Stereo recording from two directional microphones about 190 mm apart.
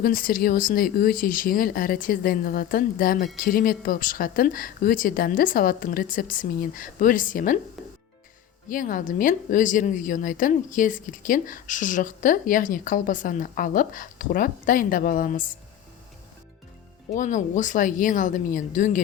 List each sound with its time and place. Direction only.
0.0 s a woman's voice: 50° left (ahead or behind)
8.7 s a woman's voice: 45° left (ahead or behind)
17.2 s speech: 40° left (ahead or behind)